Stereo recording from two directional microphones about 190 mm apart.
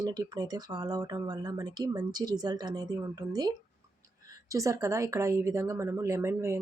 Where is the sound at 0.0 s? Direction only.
20° right (ahead or behind).